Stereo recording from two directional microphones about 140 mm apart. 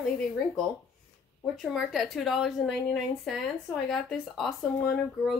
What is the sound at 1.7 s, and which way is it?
A woman's voice, centre (ahead or behind).